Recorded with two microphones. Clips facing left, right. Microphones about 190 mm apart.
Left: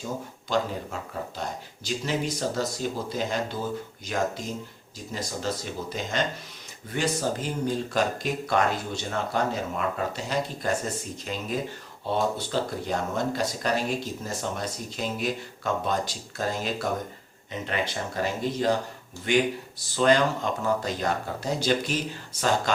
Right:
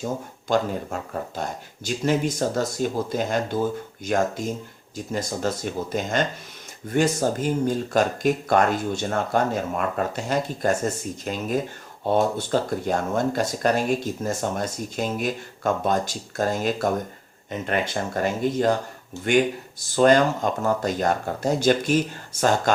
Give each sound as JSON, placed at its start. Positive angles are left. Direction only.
{"t": 0.0, "sound": "speech", "side_deg": -50}
{"t": 5.9, "sound": "speech", "side_deg": -50}